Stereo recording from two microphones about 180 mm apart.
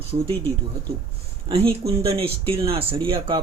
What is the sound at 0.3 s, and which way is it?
Speech, 10° left (ahead or behind).